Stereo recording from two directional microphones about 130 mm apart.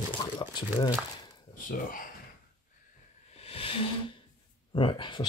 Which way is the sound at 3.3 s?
45° left (ahead or behind).